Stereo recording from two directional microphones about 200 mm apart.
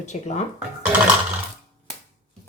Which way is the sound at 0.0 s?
35° left (ahead or behind).